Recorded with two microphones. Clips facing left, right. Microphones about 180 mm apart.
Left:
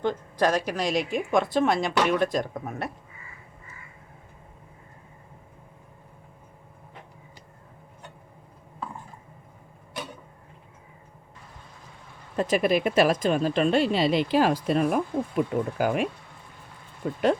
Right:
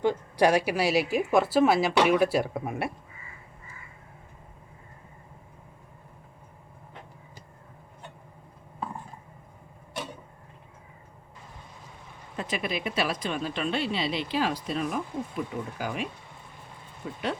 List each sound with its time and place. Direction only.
0.0 s a woman's voice: 10° right (ahead or behind)
12.4 s speech: 45° left (ahead or behind)
17.0 s speech: 50° left (ahead or behind)